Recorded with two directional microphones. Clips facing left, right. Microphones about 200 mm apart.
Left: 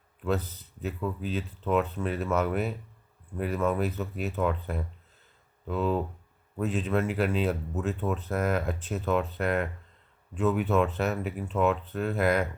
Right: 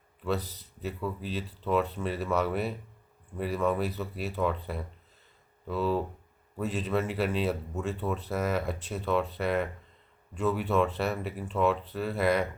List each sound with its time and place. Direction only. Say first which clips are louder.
0.3 s speech: left 2 dB; 35° right (ahead or behind)
0.8 s speech: left 2 dB; centre (ahead or behind)